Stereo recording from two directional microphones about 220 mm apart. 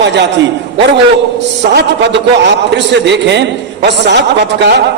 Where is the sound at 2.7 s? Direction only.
50° right (ahead or behind).